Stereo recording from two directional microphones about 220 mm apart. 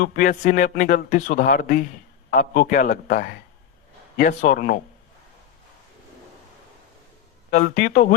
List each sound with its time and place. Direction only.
0.0 s speech: 40° left (ahead or behind)
7.5 s speech: 40° left (ahead or behind)